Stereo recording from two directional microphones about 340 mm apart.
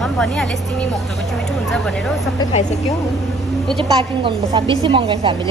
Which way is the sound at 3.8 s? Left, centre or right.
Centre.